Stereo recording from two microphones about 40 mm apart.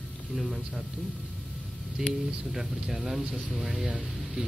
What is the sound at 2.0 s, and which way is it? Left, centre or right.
Speech, centre.